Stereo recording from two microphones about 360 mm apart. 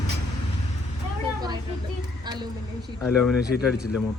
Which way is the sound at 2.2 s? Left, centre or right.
Centre.